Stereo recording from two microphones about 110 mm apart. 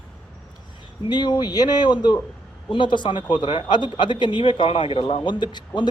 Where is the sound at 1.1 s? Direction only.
45° left (ahead or behind).